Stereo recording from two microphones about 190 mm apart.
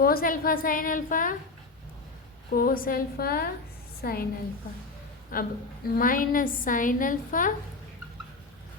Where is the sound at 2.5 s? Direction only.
50° left (ahead or behind).